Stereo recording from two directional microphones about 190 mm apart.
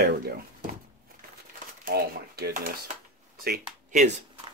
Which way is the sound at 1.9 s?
50° right (ahead or behind).